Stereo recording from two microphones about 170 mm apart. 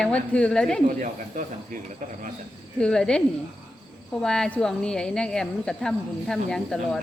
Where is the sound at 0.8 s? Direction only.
50° right (ahead or behind).